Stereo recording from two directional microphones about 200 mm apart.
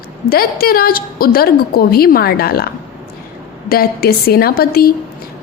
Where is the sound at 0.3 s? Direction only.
50° left (ahead or behind).